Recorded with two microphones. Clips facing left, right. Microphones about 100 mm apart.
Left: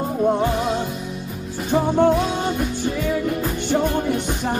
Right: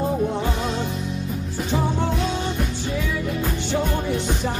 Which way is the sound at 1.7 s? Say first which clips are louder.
Left 8 dB; 50° left (ahead or behind).